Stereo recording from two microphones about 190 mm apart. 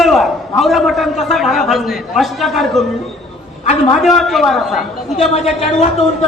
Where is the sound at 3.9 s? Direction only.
Centre (ahead or behind).